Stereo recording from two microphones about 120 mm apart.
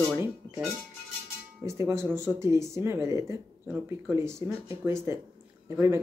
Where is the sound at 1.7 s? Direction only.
20° right (ahead or behind).